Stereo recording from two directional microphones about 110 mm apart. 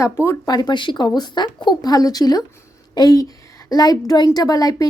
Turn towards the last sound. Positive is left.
turn(degrees=35)  # may be behind; listen again after turning